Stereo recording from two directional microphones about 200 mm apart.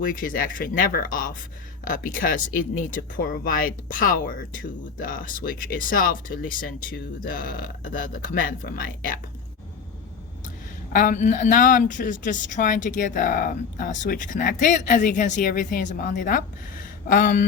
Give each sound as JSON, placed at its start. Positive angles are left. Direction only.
{"t": 0.0, "sound": "speech", "side_deg": 45}
{"t": 10.9, "sound": "speech", "side_deg": 40}